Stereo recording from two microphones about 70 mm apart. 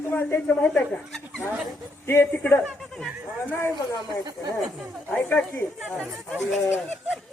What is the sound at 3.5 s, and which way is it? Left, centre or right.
Speech, left.